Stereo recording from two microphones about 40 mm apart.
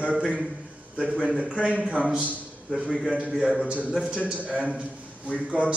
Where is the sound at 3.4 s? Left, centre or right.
Right.